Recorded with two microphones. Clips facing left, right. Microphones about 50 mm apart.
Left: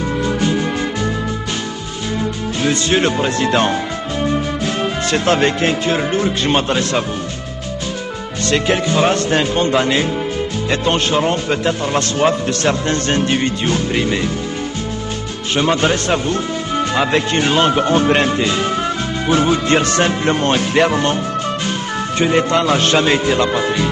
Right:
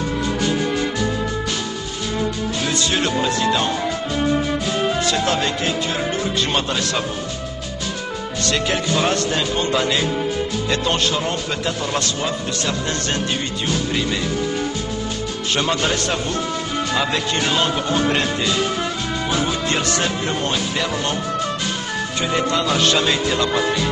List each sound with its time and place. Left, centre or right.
2.6 s speech: left
5.0 s speech: left
6.2 s speech: left
8.4 s speech: left
12.2 s speech: left
15.5 s speech: left
22.2 s speech: left